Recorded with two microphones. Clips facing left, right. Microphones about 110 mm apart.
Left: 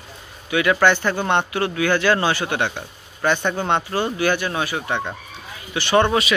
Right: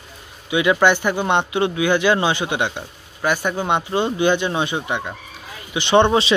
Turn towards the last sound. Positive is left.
turn(degrees=-25)  # may be behind; listen again after turning